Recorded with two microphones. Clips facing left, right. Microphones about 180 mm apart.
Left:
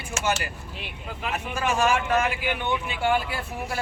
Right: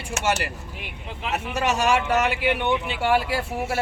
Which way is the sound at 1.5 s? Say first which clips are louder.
Right 2 dB; 75° right (ahead or behind).